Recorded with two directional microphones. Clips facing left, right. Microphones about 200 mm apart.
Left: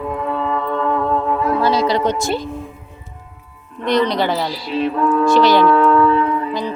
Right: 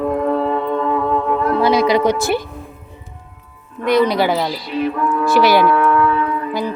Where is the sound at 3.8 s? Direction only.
10° right (ahead or behind).